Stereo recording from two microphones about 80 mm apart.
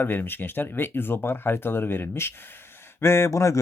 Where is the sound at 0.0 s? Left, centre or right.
Left.